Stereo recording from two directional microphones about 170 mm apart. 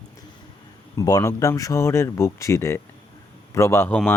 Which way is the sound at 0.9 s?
20° left (ahead or behind).